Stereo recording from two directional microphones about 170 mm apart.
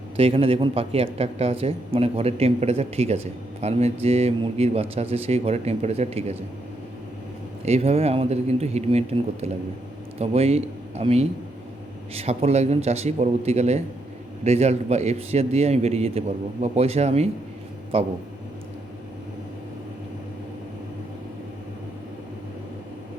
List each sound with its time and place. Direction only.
0.2 s speech: 35° right (ahead or behind)
7.6 s speech: 35° right (ahead or behind)